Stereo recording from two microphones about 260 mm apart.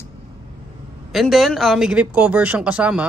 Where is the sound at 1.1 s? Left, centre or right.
Centre.